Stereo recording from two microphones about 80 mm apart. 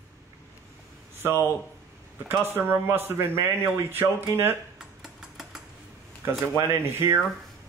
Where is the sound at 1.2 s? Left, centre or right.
Right.